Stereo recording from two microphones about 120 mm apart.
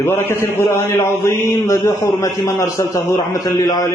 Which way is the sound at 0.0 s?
20° left (ahead or behind).